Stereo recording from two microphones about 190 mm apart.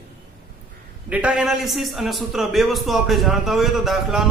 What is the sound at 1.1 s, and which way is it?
A man's voice, 5° right (ahead or behind).